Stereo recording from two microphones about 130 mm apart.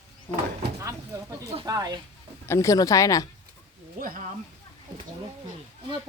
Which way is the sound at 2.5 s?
25° left (ahead or behind).